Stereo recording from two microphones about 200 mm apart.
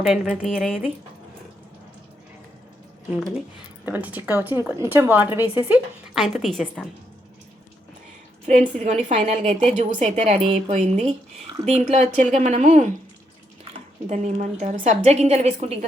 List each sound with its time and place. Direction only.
0.0 s a woman's voice: centre (ahead or behind)
3.2 s a woman's voice: centre (ahead or behind)
8.8 s a woman's voice: 35° right (ahead or behind)
14.1 s a woman's voice: 35° right (ahead or behind)